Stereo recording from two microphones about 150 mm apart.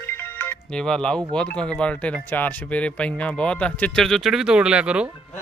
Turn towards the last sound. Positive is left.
turn(degrees=-5)  # may be behind; listen again after turning